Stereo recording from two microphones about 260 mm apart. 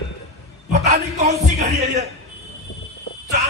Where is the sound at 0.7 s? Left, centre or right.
Right.